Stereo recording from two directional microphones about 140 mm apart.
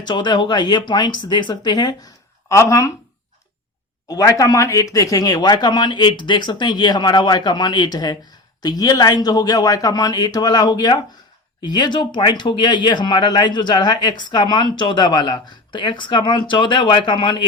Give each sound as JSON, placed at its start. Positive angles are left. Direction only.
{"t": 0.0, "sound": "a man's voice", "side_deg": 30}
{"t": 4.1, "sound": "a man's voice", "side_deg": 25}